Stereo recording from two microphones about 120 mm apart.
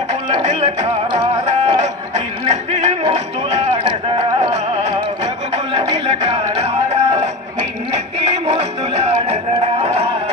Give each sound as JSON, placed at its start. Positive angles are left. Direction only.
{"t": 0.4, "sound": "music", "side_deg": -65}
{"t": 3.5, "sound": "a sound", "side_deg": -65}
{"t": 5.7, "sound": "music", "side_deg": -65}